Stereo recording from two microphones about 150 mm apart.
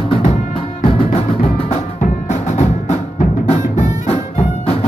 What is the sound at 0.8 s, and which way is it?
Music, 40° left (ahead or behind).